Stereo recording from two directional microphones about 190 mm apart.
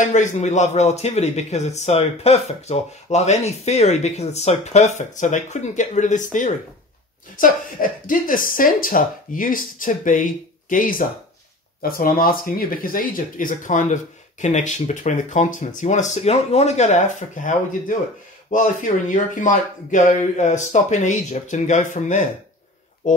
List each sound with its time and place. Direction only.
0.0 s a man's voice: 40° left (ahead or behind)